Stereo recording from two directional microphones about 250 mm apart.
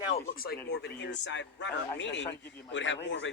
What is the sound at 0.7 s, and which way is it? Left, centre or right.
Speech, left.